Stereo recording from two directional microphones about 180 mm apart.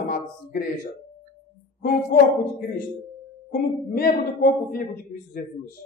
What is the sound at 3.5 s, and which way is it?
A man's voice, 55° left (ahead or behind).